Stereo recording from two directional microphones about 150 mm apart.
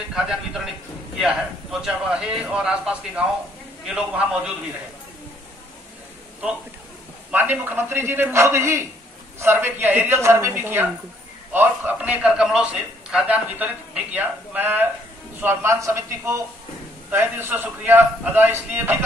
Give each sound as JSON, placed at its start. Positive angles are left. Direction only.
{"t": 0.1, "sound": "a man's voice", "side_deg": -5}
{"t": 7.2, "sound": "a man's voice", "side_deg": -10}